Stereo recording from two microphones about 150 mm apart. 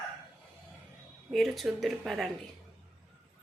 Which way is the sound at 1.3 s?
Centre (ahead or behind).